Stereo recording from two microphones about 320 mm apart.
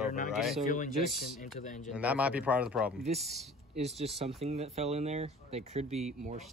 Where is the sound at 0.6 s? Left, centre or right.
Left.